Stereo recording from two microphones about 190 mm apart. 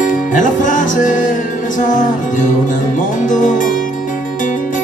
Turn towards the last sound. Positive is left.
turn(degrees=45)  # may be behind; listen again after turning